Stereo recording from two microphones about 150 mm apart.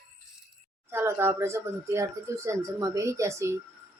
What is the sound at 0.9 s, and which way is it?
Speech, 15° right (ahead or behind).